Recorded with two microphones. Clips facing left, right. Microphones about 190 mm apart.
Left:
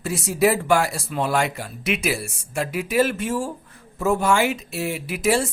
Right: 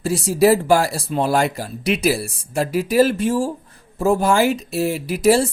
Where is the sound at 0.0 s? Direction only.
35° right (ahead or behind).